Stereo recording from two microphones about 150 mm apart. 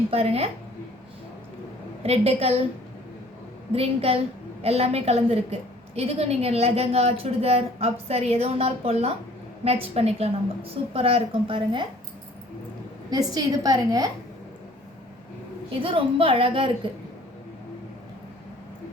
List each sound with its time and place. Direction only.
0.1 s a woman's voice: 40° right (ahead or behind)
2.0 s a woman's voice: 40° right (ahead or behind)
3.7 s a woman's voice: 40° right (ahead or behind)
13.1 s a woman's voice: 25° right (ahead or behind)
15.8 s a woman's voice: 35° right (ahead or behind)